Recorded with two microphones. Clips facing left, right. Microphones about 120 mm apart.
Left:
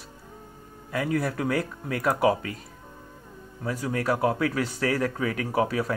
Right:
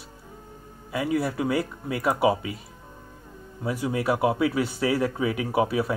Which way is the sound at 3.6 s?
10° right (ahead or behind).